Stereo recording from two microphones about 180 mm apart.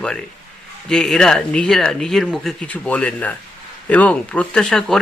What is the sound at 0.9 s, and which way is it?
Speech, 5° left (ahead or behind).